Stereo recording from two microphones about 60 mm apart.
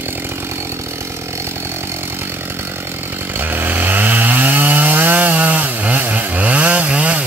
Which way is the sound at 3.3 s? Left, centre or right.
Right.